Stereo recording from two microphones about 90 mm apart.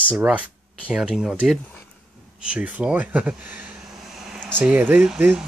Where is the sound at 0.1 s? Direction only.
15° right (ahead or behind).